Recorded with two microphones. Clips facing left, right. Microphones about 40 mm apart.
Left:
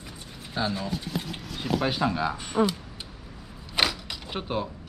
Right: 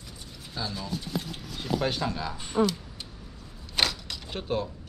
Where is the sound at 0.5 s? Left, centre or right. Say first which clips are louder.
Left 6 dB; left.